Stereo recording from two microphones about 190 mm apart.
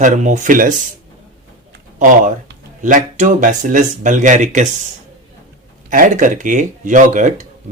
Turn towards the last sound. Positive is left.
turn(degrees=-40)  # may be behind; listen again after turning